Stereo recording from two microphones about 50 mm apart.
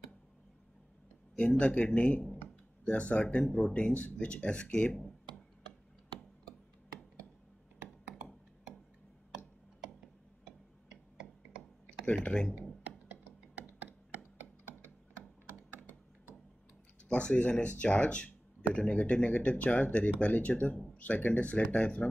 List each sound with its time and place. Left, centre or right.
1.6 s speech: left
2.3 s speech: left
10.9 s clicking: centre
12.1 s speech: centre
13.7 s a sound: right
17.1 s speech: left